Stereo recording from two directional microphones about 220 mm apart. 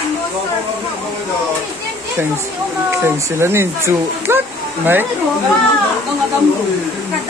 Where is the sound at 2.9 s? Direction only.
10° right (ahead or behind).